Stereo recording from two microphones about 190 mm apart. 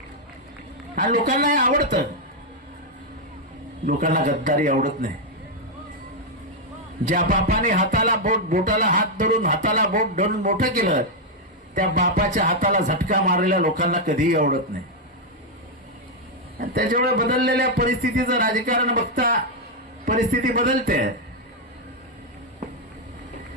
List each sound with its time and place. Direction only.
0.9 s speech: 45° right (ahead or behind)
3.8 s speech: 45° right (ahead or behind)
7.1 s speech: 45° right (ahead or behind)
16.6 s speech: 50° right (ahead or behind)